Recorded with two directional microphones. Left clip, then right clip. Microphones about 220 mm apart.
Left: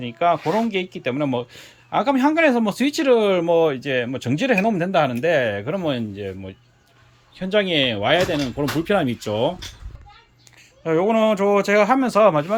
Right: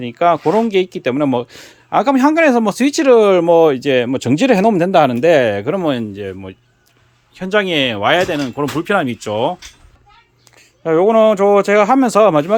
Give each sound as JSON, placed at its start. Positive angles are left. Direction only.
{"t": 0.0, "sound": "speech", "side_deg": -25}
{"t": 10.8, "sound": "speech", "side_deg": -20}